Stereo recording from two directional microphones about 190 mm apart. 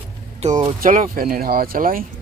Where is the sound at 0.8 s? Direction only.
45° right (ahead or behind).